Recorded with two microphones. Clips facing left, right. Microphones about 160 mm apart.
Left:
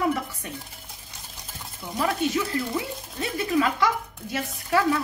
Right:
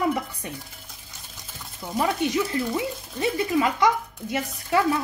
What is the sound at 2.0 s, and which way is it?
A woman's voice, 20° right (ahead or behind).